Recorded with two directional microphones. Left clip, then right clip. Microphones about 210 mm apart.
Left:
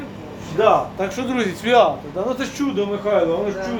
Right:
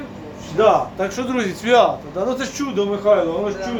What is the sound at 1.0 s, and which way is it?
A man's voice, centre (ahead or behind).